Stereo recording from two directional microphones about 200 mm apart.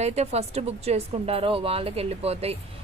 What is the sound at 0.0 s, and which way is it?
A woman's voice, 35° right (ahead or behind).